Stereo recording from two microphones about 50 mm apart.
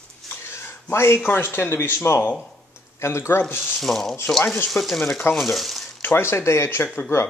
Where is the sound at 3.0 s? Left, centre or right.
Left.